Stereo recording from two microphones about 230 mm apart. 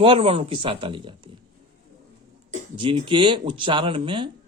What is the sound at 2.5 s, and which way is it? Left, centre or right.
Speech, right.